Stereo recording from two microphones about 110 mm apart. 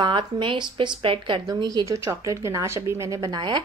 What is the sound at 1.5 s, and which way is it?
Speech, 35° right (ahead or behind).